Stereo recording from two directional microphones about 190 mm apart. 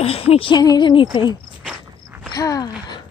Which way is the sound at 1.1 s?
25° left (ahead or behind).